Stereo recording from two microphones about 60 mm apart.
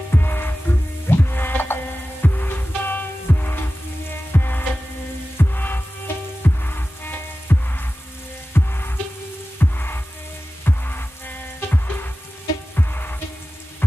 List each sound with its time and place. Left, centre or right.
0.1 s music: left